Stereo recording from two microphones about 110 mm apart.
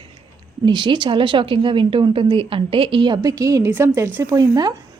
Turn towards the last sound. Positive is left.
turn(degrees=-35)  # may be behind; listen again after turning